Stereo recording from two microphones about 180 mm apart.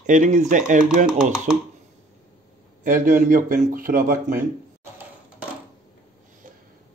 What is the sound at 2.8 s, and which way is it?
A man's voice, 45° right (ahead or behind).